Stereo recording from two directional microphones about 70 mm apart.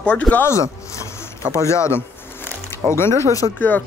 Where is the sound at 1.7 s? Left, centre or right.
Left.